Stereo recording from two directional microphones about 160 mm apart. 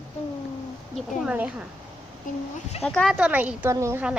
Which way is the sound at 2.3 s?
55° left (ahead or behind).